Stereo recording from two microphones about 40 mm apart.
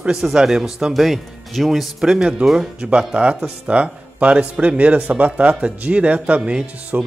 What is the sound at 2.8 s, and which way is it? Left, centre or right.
Speech, right.